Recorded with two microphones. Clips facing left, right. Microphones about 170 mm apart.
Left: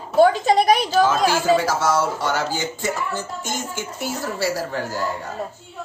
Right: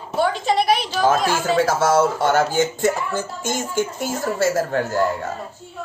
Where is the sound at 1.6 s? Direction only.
55° right (ahead or behind).